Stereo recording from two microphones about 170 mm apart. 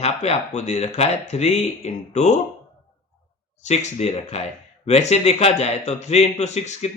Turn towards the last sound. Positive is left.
turn(degrees=40)  # may be behind; listen again after turning